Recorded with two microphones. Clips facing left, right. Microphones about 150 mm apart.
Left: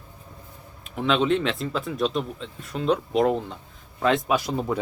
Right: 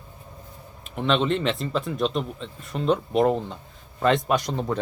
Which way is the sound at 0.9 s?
Centre (ahead or behind).